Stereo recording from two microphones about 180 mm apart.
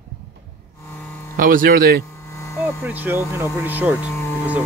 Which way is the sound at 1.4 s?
50° right (ahead or behind).